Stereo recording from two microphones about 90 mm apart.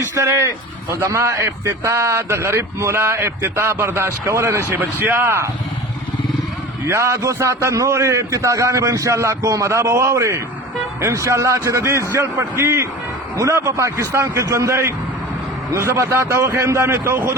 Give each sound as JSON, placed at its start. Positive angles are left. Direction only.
{"t": 0.0, "sound": "a man's voice", "side_deg": -30}
{"t": 6.8, "sound": "a man's voice", "side_deg": -30}